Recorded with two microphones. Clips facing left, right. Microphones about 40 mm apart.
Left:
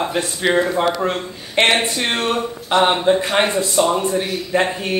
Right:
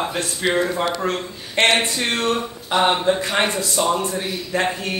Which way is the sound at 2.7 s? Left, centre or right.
Centre.